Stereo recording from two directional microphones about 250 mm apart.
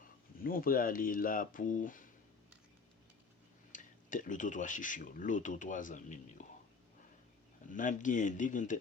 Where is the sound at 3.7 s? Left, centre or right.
Left.